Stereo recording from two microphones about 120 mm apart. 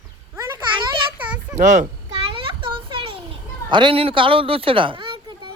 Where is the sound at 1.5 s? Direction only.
90° right.